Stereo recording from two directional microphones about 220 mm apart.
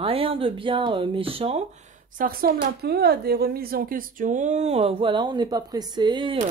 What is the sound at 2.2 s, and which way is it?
Speech, 40° right (ahead or behind).